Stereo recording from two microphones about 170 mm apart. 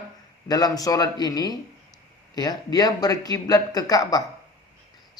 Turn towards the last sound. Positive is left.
turn(degrees=20)  # may be behind; listen again after turning